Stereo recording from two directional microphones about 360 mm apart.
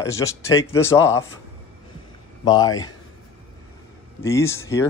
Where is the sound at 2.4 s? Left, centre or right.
Centre.